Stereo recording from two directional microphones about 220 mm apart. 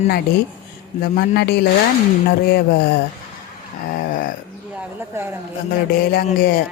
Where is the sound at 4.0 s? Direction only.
35° left (ahead or behind).